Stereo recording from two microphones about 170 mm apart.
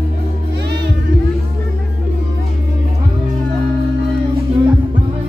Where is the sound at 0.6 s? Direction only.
80° right.